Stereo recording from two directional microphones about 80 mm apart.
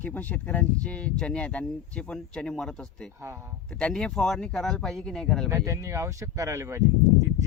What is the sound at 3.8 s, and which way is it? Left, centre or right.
Speech, centre.